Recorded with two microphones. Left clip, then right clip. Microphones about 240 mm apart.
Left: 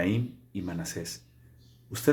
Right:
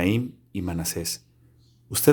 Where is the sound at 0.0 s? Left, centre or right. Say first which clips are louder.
Right 5 dB; right.